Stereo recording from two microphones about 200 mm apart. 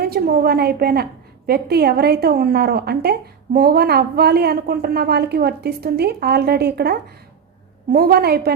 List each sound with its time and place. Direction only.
0.0 s a woman's voice: 50° right (ahead or behind)